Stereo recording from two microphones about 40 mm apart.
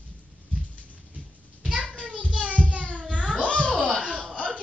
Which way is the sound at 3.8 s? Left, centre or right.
Left.